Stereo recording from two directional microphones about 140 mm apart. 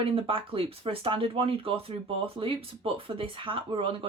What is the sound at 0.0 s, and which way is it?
Speech, 40° right (ahead or behind).